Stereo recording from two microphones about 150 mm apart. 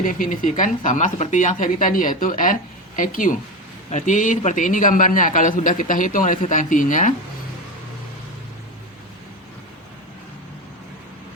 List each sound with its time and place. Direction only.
0.0 s a man's voice: 60° left (ahead or behind)